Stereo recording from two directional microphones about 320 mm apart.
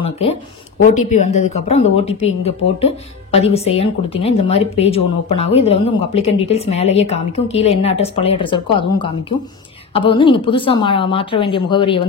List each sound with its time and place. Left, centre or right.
0.0 s a woman's voice: centre